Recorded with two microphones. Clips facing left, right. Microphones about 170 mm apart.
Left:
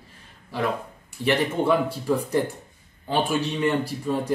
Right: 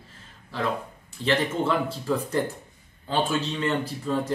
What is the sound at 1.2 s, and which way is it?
Speech, 10° left (ahead or behind).